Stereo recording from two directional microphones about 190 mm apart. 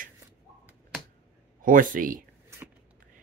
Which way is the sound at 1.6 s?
45° right (ahead or behind).